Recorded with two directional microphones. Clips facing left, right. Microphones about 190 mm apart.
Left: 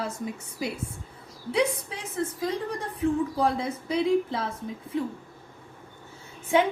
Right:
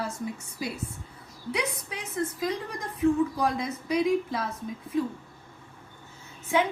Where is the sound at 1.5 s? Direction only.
30° left (ahead or behind).